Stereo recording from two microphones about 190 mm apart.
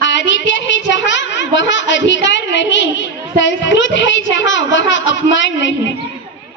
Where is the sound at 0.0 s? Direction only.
75° left (ahead or behind).